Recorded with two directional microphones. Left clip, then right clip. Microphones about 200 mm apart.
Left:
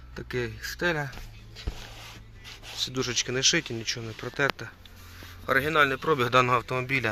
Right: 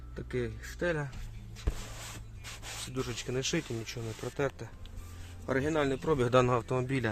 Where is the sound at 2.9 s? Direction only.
15° left (ahead or behind).